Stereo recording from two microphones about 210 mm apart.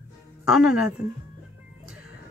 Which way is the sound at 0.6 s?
5° right (ahead or behind).